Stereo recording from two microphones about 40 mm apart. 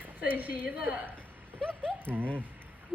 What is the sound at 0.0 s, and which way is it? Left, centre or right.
Speech, right.